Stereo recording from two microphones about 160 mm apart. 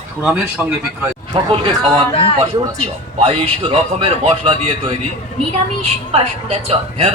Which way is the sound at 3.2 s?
35° right (ahead or behind).